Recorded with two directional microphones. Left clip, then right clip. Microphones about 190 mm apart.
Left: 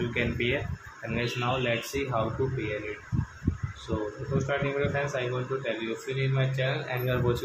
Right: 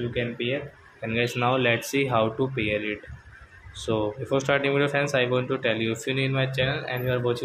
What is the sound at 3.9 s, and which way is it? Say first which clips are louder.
A man's voice: right 7 dB; 40° right (ahead or behind).